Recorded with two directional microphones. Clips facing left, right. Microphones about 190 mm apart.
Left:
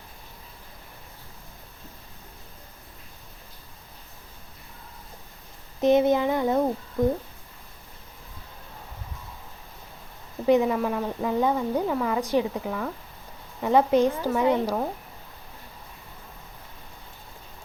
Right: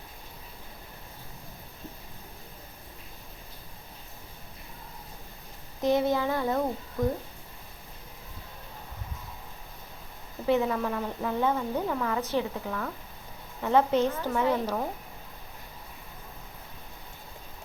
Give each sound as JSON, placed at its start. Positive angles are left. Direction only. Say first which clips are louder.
{"t": 5.8, "sound": "child singing", "louder": "left 5 dB", "side_deg": 20}
{"t": 10.4, "sound": "speech", "louder": "left 5 dB", "side_deg": 15}